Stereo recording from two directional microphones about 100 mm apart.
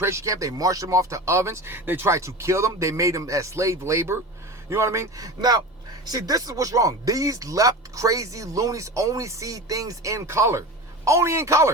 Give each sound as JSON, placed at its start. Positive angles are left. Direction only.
{"t": 0.0, "sound": "speech", "side_deg": -30}